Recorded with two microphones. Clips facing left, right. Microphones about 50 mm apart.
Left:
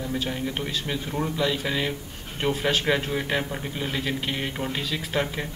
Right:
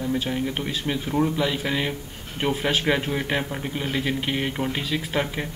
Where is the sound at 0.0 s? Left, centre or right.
Centre.